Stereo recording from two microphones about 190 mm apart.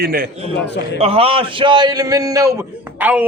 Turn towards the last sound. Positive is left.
turn(degrees=-10)  # may be behind; listen again after turning